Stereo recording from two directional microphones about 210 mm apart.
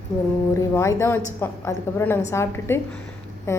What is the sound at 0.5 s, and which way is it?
A woman's voice, 15° left (ahead or behind).